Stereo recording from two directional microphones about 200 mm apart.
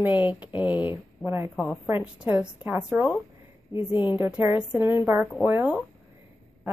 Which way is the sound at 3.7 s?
25° left (ahead or behind).